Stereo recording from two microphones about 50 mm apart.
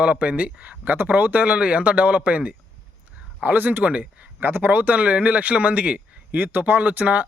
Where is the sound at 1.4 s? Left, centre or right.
Right.